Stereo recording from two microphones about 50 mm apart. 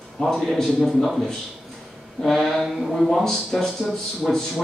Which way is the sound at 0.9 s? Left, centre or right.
Centre.